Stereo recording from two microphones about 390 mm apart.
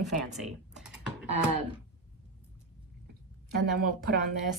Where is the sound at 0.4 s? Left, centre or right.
Centre.